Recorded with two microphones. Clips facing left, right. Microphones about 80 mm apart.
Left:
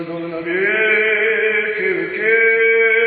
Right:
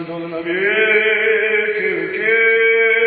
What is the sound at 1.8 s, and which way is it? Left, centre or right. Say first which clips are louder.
Male singing: left 1 dB; left.